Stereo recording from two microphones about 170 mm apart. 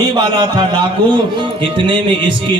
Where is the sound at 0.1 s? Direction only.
25° right (ahead or behind).